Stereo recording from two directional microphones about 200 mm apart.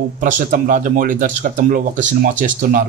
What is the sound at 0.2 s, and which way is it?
Speech, 40° right (ahead or behind).